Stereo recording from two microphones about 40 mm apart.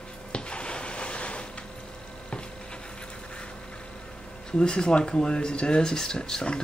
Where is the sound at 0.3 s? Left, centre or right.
Left.